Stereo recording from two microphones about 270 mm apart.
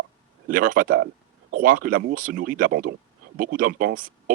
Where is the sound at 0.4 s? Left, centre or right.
Right.